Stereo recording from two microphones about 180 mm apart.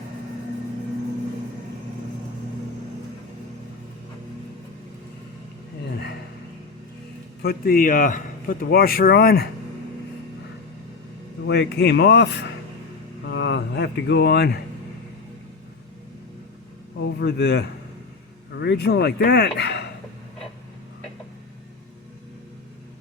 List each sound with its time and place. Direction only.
7.4 s speech: 55° left (ahead or behind)
11.4 s speech: 75° left (ahead or behind)
13.2 s speech: 80° left; by 14.6 s 65° left (ahead or behind)
17.0 s speech: 70° left (ahead or behind)